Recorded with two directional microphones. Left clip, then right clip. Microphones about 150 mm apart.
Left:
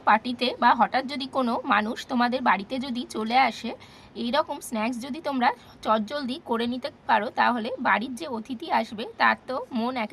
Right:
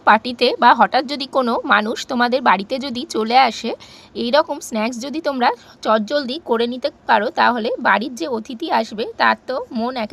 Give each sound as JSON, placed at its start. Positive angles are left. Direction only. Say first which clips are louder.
{"t": 0.0, "sound": "a woman's voice", "louder": "right 8 dB", "side_deg": -40}